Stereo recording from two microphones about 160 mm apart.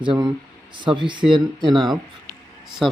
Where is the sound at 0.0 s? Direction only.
30° right (ahead or behind).